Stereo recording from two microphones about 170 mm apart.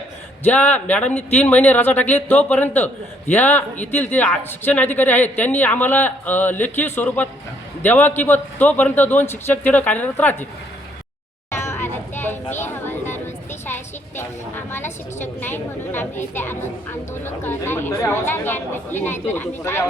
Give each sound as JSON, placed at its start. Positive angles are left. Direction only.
{"t": 0.4, "sound": "a woman's voice", "side_deg": 10}
{"t": 11.5, "sound": "a sound", "side_deg": 15}
{"t": 13.7, "sound": "a woman's voice", "side_deg": 10}